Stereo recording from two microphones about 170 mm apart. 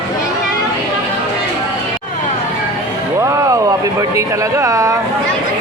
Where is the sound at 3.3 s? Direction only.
20° right (ahead or behind).